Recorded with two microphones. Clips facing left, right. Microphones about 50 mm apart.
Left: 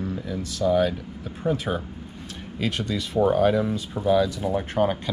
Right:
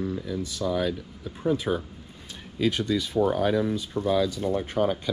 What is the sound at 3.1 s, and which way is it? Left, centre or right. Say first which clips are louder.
Speech: left 5 dB; left.